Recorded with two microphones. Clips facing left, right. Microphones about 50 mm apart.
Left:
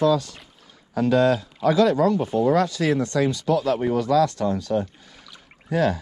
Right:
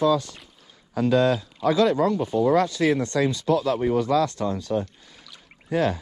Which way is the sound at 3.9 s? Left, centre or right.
Right.